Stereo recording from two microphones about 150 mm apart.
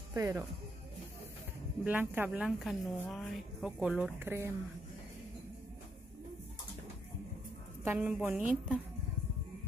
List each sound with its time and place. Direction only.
0.1 s speech: 20° right (ahead or behind)
1.9 s speech: 10° right (ahead or behind)
7.8 s a woman's voice: 15° right (ahead or behind)